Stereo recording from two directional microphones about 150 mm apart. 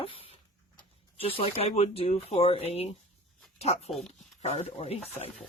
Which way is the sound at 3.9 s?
Centre (ahead or behind).